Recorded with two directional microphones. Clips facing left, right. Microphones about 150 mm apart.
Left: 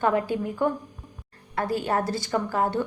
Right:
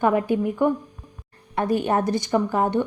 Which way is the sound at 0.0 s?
20° right (ahead or behind).